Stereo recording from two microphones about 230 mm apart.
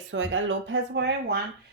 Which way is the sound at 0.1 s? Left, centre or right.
Right.